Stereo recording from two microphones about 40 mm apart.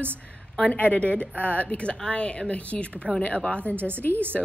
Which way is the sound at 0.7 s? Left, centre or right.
Left.